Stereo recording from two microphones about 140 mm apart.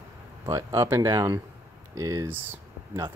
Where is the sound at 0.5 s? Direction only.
25° right (ahead or behind).